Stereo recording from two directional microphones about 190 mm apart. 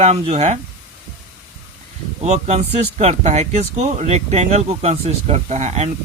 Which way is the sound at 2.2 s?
35° right (ahead or behind).